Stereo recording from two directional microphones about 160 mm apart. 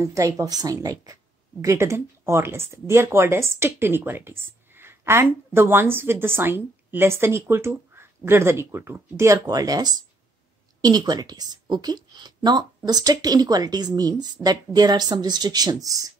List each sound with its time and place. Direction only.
0.0 s speech: 20° right (ahead or behind)